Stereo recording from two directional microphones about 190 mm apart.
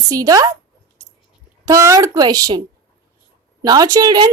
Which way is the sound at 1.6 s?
15° right (ahead or behind).